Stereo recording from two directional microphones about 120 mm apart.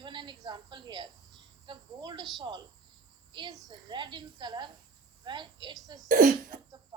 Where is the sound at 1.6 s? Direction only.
40° right (ahead or behind).